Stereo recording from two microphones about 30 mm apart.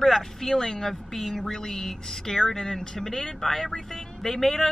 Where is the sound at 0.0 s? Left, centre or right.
Centre.